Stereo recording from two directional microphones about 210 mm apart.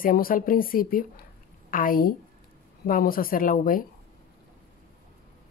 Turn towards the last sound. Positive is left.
turn(degrees=40)  # may be behind; listen again after turning